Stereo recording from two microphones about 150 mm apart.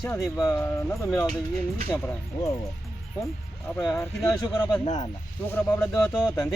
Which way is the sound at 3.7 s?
20° left (ahead or behind).